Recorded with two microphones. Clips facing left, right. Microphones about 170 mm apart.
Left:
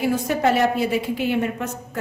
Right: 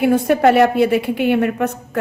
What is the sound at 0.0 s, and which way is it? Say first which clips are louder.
A woman's voice: right 7 dB; 60° right (ahead or behind).